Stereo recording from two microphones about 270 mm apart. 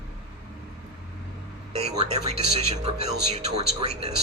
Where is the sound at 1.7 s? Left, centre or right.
Right.